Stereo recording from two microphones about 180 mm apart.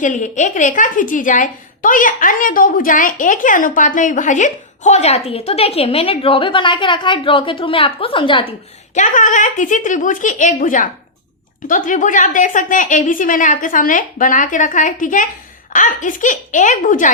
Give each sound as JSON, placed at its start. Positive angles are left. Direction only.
{"t": 0.0, "sound": "a woman's voice", "side_deg": 45}
{"t": 9.0, "sound": "a woman's voice", "side_deg": 45}